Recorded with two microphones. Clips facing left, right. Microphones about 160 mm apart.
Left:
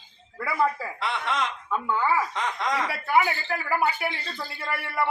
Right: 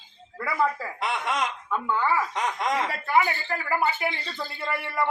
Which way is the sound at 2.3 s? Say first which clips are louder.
Right 1 dB; 20° right (ahead or behind).